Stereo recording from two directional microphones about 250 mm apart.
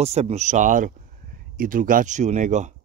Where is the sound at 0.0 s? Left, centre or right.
Right.